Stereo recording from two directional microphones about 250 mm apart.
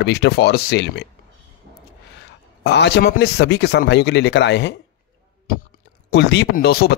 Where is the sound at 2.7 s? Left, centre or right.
Left.